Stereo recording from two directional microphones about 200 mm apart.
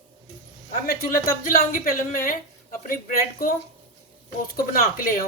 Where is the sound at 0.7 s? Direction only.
45° left (ahead or behind).